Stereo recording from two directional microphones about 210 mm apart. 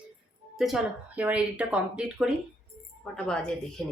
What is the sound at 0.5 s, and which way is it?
A woman's voice, centre (ahead or behind).